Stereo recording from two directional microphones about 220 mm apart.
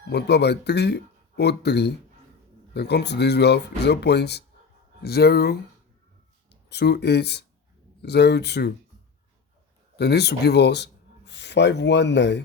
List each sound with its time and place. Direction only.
0.1 s speech: 50° left (ahead or behind)
10.0 s speech: 50° left (ahead or behind)